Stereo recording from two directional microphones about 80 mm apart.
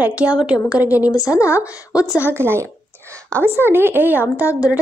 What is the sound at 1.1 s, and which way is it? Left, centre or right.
Speech, left.